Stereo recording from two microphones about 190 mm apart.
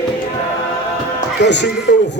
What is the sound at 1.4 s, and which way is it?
Music, 65° left (ahead or behind).